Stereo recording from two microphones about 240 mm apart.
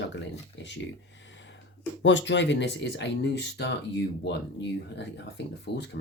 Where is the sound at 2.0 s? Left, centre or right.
Left.